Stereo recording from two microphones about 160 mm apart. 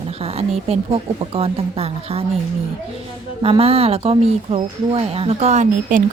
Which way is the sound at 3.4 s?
35° right (ahead or behind).